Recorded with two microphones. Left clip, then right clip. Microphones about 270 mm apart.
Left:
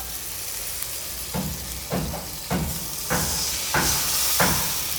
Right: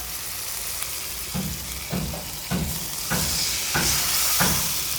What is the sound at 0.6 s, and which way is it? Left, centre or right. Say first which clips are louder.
Frying: right 2 dB; centre.